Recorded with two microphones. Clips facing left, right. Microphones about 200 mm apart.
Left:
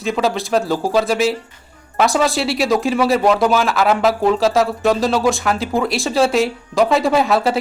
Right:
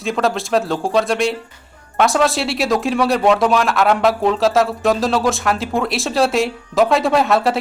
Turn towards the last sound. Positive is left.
turn(degrees=0)  # may be behind; listen again after turning